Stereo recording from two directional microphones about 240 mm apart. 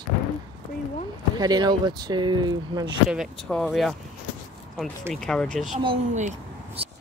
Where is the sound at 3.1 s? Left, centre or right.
Centre.